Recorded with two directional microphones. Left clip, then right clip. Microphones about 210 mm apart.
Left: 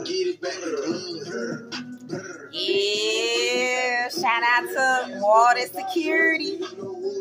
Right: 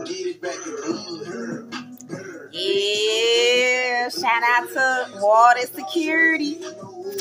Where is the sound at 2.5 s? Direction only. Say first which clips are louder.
Right 2 dB; 5° right (ahead or behind).